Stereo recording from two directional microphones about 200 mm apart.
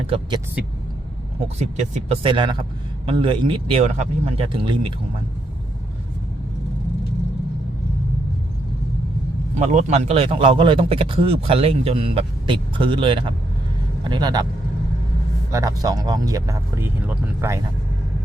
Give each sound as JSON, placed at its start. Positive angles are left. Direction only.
{"t": 0.1, "sound": "a man's voice", "side_deg": -20}
{"t": 1.5, "sound": "a man's voice", "side_deg": -35}
{"t": 9.6, "sound": "a man's voice", "side_deg": -35}
{"t": 15.5, "sound": "speech", "side_deg": -15}